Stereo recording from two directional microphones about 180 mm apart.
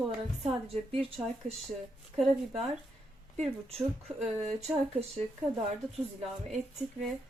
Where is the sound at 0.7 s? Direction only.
30° right (ahead or behind).